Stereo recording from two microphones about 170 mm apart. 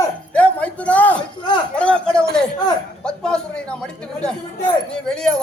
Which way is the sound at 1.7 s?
5° left (ahead or behind).